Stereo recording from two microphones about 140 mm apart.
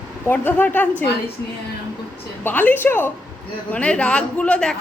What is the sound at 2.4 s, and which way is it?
A man's voice, 15° left (ahead or behind).